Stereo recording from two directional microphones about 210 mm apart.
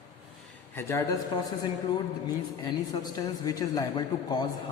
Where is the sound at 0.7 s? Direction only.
15° left (ahead or behind).